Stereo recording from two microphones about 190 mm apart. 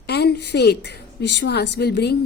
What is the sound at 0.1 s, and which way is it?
A woman's voice, 60° left (ahead or behind).